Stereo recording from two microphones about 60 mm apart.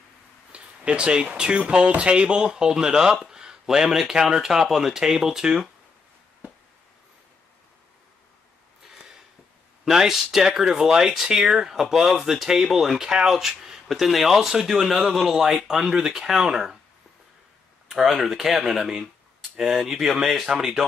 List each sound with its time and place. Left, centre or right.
0.5 s speech: centre
8.8 s a sound: centre
9.8 s speech: centre
17.8 s speech: centre